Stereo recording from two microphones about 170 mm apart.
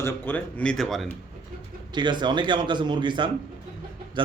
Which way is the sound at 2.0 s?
25° right (ahead or behind).